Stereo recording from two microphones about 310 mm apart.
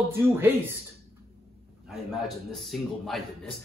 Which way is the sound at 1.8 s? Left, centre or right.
Centre.